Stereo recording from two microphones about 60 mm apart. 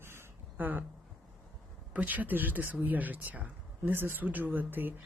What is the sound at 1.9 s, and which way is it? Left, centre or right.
Speech, right.